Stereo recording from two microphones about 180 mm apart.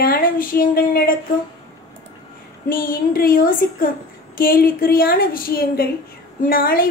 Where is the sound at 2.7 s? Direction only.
55° left (ahead or behind).